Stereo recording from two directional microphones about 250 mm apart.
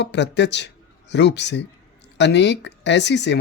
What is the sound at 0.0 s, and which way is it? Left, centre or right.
Speech, left.